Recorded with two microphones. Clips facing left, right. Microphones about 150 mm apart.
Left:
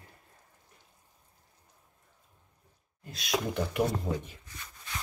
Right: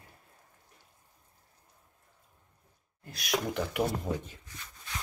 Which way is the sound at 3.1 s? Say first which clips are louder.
Even; 25° left (ahead or behind).